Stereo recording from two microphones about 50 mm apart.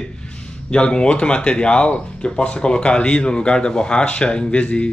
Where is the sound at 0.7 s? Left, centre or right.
Centre.